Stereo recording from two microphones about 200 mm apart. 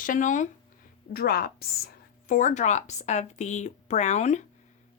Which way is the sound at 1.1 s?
50° left (ahead or behind).